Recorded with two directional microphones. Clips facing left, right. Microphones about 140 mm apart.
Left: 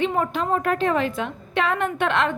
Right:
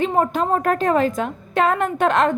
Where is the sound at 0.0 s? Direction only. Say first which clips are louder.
Right 4 dB; 40° right (ahead or behind).